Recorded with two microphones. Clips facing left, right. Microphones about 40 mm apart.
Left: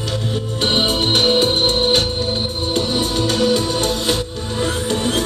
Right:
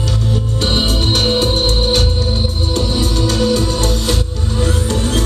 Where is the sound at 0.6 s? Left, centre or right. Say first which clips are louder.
Left 1 dB; left.